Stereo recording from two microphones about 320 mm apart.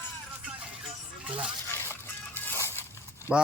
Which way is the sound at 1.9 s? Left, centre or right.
Centre.